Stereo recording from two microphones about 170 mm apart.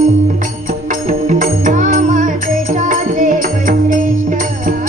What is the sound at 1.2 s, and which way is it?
Music, 50° right (ahead or behind).